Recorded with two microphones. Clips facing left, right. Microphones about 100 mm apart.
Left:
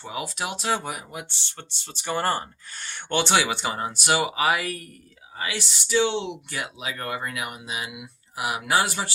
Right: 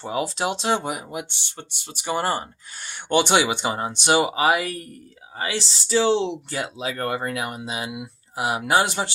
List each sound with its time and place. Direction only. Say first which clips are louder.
0.0 s speech: right 6 dB; 35° right (ahead or behind)